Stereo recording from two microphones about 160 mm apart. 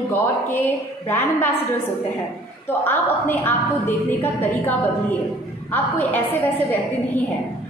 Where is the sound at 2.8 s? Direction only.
15° left (ahead or behind).